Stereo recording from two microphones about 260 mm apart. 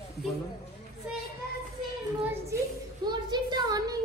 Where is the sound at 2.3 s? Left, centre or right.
Centre.